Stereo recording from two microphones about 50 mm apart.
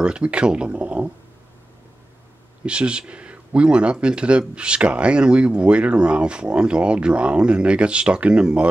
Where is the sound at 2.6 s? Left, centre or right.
Right.